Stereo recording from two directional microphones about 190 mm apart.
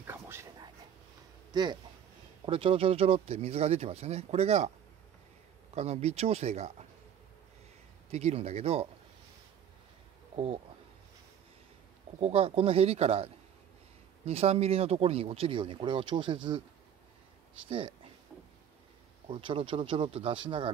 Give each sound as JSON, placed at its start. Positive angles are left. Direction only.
{"t": 0.0, "sound": "a sound", "side_deg": -15}
{"t": 1.5, "sound": "speech", "side_deg": -20}
{"t": 5.8, "sound": "speech", "side_deg": -35}
{"t": 8.1, "sound": "speech", "side_deg": -35}
{"t": 10.3, "sound": "speech", "side_deg": -30}
{"t": 12.2, "sound": "speech", "side_deg": -30}
{"t": 17.6, "sound": "speech", "side_deg": -30}
{"t": 19.2, "sound": "speech", "side_deg": -25}